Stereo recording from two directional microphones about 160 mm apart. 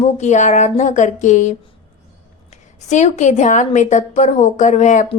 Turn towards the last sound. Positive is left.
turn(degrees=50)  # may be behind; listen again after turning